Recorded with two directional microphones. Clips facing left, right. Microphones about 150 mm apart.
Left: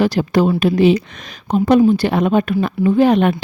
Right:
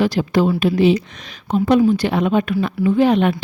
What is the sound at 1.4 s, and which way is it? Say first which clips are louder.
A woman's voice: left 2 dB; 40° left (ahead or behind).